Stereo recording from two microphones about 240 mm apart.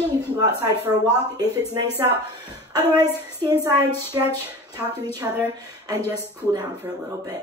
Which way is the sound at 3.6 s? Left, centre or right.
Centre.